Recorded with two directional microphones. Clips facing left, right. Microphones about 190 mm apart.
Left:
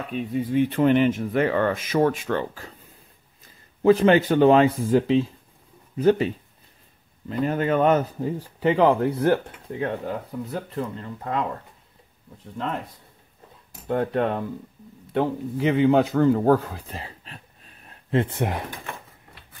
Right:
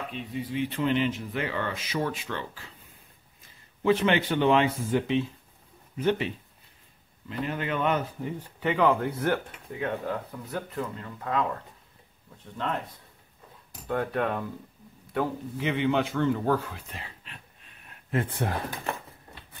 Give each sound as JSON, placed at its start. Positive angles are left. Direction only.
{"t": 0.1, "sound": "speech", "side_deg": 50}
{"t": 3.8, "sound": "speech", "side_deg": 40}
{"t": 13.8, "sound": "speech", "side_deg": 25}
{"t": 15.7, "sound": "a man's voice", "side_deg": 40}